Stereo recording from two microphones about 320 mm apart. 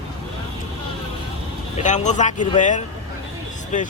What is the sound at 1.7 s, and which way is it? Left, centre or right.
Speech, left.